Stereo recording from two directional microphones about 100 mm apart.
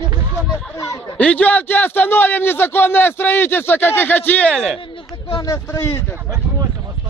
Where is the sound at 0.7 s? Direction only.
35° left (ahead or behind).